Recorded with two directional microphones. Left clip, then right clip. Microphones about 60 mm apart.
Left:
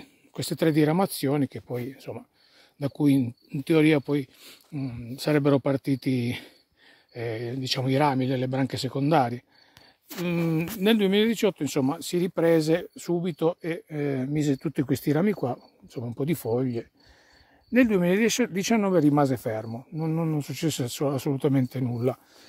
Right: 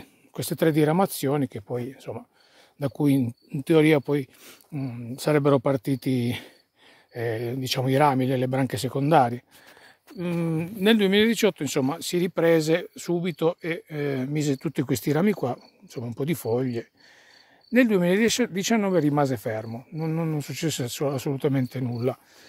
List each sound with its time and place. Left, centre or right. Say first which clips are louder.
0.0 s speech: even; right
3.0 s speech: left 1 dB; right
4.1 s speech: right 2 dB; right
4.7 s speech: right 1 dB; right
5.3 s speech: right 2 dB; right
7.2 s speech: right 3 dB; right
7.8 s speech: right 3 dB; right
10.2 s speech: left 1 dB; centre
10.8 s speech: right 3 dB; centre
11.3 s speech: right 2 dB; centre
18.2 s speech: right 1 dB; centre
18.5 s speech: even; left
19.6 s speech: even; centre